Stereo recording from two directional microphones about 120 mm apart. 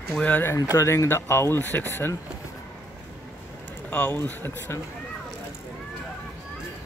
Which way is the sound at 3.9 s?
15° left (ahead or behind).